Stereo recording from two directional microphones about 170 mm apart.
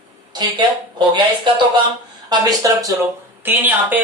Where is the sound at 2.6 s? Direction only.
20° right (ahead or behind).